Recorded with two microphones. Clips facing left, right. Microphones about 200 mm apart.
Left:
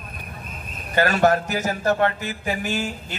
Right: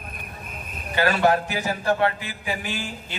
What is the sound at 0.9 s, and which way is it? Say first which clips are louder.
A man's voice: left 2 dB; 45° left (ahead or behind).